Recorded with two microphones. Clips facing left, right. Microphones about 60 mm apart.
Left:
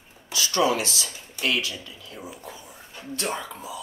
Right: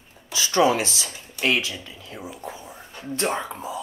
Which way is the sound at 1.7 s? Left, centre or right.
Right.